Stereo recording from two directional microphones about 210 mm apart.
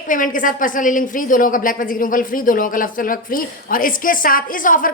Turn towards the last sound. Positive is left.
turn(degrees=40)  # may be behind; listen again after turning